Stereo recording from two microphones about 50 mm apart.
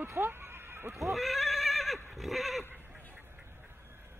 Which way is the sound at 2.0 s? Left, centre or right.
Centre.